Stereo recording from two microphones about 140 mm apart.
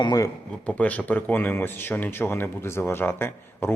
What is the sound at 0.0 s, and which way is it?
Speech, 30° left (ahead or behind).